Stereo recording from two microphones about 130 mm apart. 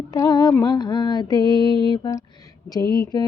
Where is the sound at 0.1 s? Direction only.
30° left (ahead or behind).